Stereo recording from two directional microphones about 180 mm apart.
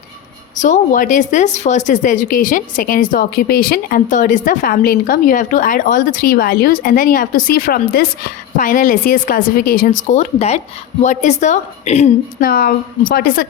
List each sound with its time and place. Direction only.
0.5 s a woman's voice: 45° left (ahead or behind)
12.4 s speech: 55° left (ahead or behind)